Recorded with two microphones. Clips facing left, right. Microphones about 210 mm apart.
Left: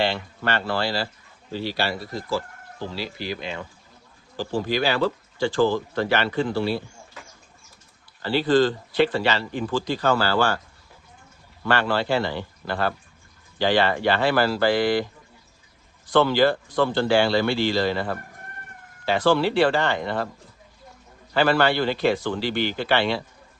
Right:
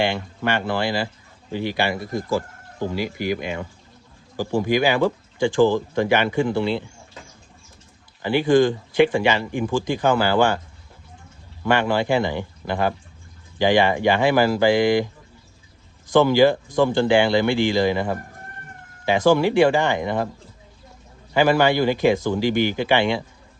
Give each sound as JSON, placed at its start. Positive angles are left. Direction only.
{"t": 0.0, "sound": "speech", "side_deg": -15}
{"t": 2.1, "sound": "speech", "side_deg": -50}
{"t": 2.9, "sound": "speech", "side_deg": -15}
{"t": 11.6, "sound": "speech", "side_deg": -15}
{"t": 16.1, "sound": "speech", "side_deg": -10}
{"t": 19.3, "sound": "speech", "side_deg": -15}
{"t": 21.3, "sound": "speech", "side_deg": -10}